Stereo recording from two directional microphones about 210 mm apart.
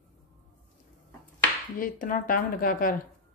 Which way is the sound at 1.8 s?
40° left (ahead or behind).